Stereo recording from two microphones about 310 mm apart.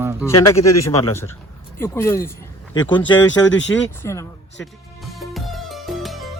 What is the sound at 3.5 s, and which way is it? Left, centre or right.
Speech, left.